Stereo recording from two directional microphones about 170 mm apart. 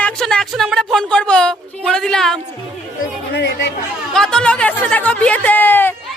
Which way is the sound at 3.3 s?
90° left.